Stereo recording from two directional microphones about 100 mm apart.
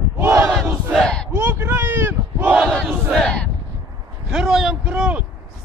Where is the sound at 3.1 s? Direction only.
5° left (ahead or behind).